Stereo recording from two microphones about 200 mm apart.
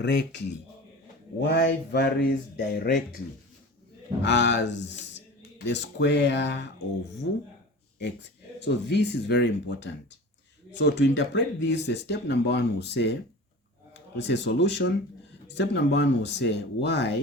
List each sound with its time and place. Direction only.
0.0 s speech: 60° left (ahead or behind)
1.5 s speech: 60° left (ahead or behind)
4.2 s speech: 60° left (ahead or behind)
7.9 s speech: 60° left (ahead or behind)
14.3 s speech: 60° left (ahead or behind)